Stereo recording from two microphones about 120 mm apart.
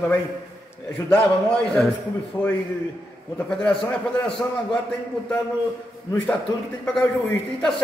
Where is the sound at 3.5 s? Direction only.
5° left (ahead or behind).